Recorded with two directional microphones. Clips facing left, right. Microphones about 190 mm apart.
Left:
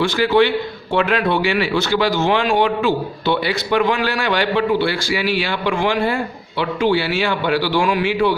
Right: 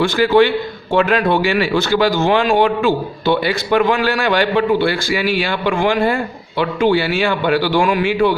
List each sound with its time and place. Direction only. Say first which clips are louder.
0.0 s speech: right 3 dB; 50° right (ahead or behind)